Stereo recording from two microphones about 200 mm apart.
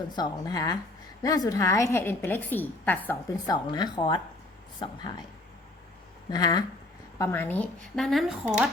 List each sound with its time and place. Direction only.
0.2 s a woman's voice: 20° left (ahead or behind)
6.3 s a woman's voice: 20° left (ahead or behind); by 8.7 s 5° right (ahead or behind)